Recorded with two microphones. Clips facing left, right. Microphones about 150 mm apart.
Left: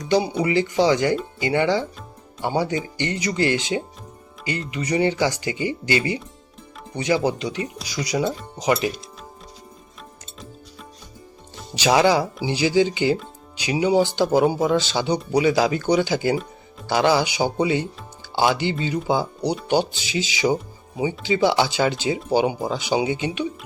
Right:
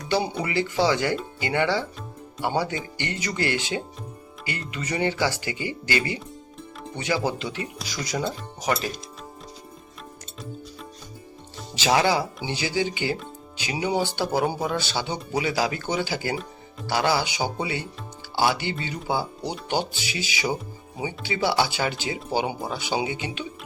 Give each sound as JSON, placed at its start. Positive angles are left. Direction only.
{"t": 0.0, "sound": "speech", "side_deg": 15}
{"t": 11.8, "sound": "speech", "side_deg": 15}